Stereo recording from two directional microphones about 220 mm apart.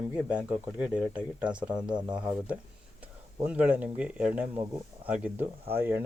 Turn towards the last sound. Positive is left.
turn(degrees=-10)  # may be behind; listen again after turning